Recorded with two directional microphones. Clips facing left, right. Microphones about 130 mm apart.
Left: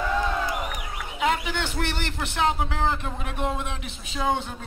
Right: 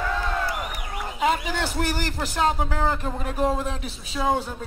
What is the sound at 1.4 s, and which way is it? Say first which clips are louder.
Speech: right 2 dB; 35° right (ahead or behind).